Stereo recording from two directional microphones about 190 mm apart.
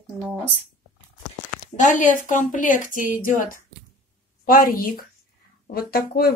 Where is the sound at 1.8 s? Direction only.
40° left (ahead or behind).